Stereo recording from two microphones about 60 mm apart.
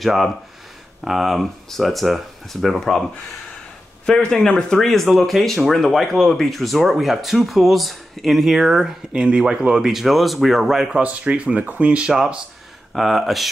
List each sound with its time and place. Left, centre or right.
0.0 s speech: centre
4.0 s speech: centre
11.0 s speech: right
12.1 s speech: centre